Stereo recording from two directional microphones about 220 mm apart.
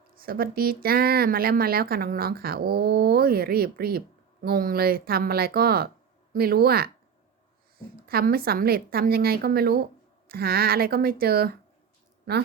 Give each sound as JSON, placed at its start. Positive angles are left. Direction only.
{"t": 0.2, "sound": "speech", "side_deg": -40}
{"t": 8.0, "sound": "speech", "side_deg": -45}